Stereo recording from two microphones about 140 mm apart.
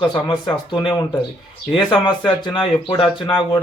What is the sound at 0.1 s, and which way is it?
Speech, 30° left (ahead or behind).